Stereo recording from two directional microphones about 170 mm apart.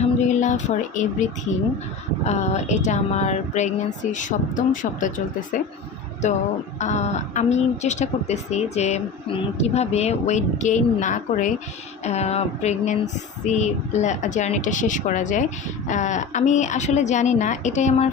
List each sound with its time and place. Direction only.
0.0 s music: 45° left (ahead or behind)
2.2 s speech: 40° left (ahead or behind)
6.7 s speech: 40° left (ahead or behind)